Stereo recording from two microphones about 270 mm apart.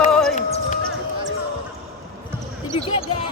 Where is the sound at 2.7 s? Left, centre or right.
Left.